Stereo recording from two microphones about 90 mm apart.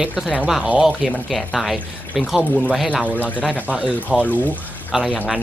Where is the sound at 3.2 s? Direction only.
15° left (ahead or behind).